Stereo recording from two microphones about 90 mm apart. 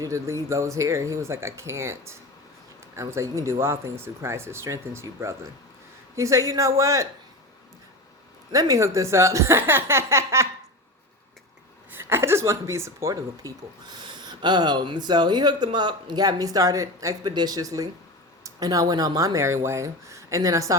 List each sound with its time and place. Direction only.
0.0 s speech: 35° right (ahead or behind)
8.5 s speech: 40° right (ahead or behind)
11.9 s speech: 25° right (ahead or behind)
13.9 s speech: 55° right (ahead or behind); by 17.2 s 35° right (ahead or behind)
17.2 s speech: 50° right (ahead or behind)